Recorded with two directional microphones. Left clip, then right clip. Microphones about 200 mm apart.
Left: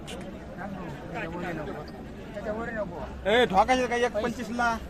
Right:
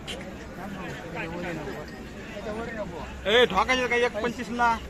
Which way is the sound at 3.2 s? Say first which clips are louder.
Right 1 dB; 60° left (ahead or behind).